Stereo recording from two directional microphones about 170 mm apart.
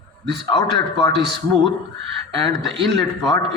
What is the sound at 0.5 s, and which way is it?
Speech, 25° left (ahead or behind).